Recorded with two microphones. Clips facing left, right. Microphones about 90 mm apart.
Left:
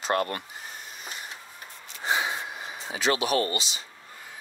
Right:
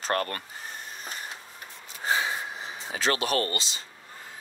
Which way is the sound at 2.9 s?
40° right (ahead or behind).